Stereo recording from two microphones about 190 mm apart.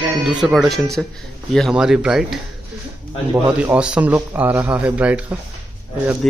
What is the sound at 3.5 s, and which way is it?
A man's voice, 5° right (ahead or behind).